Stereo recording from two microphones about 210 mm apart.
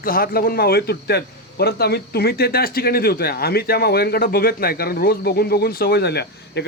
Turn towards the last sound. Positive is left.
turn(degrees=50)  # may be behind; listen again after turning